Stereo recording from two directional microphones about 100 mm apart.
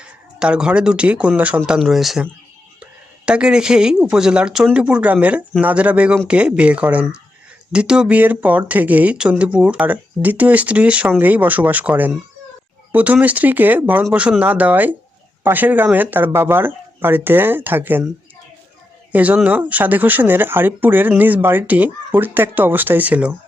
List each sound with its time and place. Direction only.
0.0 s speech: 10° right (ahead or behind)
19.1 s speech: 15° right (ahead or behind)